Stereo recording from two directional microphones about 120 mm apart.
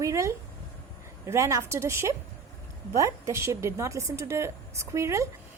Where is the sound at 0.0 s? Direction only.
25° right (ahead or behind).